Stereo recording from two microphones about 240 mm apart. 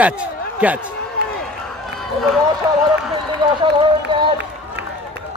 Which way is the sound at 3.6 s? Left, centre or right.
Right.